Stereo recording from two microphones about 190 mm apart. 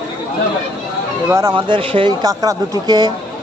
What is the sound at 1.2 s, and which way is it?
Speech, 15° right (ahead or behind).